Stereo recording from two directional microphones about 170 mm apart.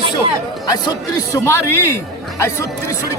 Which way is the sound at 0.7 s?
20° left (ahead or behind).